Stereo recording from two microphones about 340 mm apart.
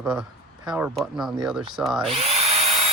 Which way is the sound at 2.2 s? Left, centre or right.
Right.